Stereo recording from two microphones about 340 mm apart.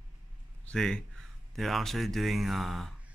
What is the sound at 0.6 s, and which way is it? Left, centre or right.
A man's voice, centre.